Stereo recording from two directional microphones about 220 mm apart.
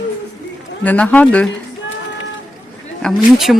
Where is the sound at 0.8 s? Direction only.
5° left (ahead or behind).